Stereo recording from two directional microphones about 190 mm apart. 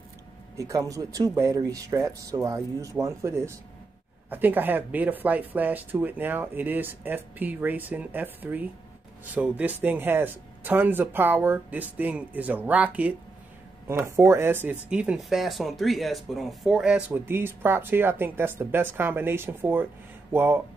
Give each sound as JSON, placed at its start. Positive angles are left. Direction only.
{"t": 0.6, "sound": "speech", "side_deg": -15}